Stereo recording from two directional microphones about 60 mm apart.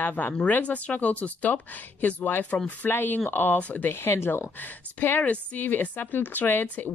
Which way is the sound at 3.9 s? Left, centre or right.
Left.